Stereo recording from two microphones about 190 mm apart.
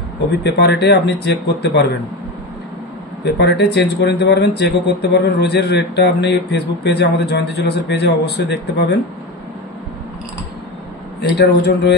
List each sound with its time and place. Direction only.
0.4 s speech: 60° left (ahead or behind)
3.3 s speech: 60° left (ahead or behind)
11.1 s speech: 60° left (ahead or behind)